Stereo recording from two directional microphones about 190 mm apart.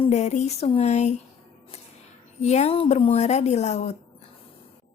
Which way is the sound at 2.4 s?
35° left (ahead or behind).